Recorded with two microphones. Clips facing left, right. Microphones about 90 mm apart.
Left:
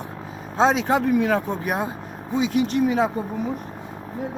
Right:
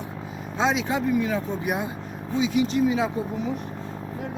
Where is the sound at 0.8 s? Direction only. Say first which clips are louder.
Left 4 dB; 60° left (ahead or behind).